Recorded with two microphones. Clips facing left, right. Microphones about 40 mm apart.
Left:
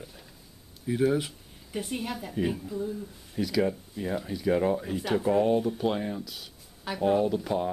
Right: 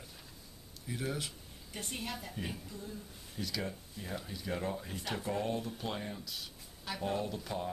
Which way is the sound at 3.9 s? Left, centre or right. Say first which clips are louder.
Left 11 dB; left.